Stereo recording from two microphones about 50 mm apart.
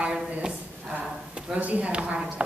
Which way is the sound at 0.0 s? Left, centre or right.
Centre.